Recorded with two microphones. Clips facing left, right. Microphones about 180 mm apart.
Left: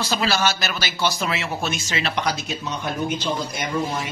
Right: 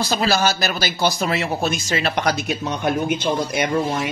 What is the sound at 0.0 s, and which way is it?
Speech, 40° right (ahead or behind).